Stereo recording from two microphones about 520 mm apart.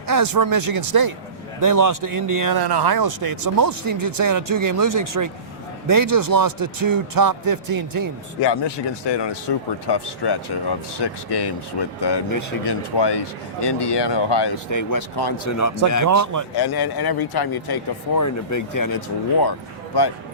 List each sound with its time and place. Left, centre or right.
0.1 s a man's voice: right
8.4 s speech: left
12.3 s speech: left
12.6 s speech: left
14.7 s speech: left
15.4 s speech: left
16.0 s a man's voice: right
16.6 s speech: left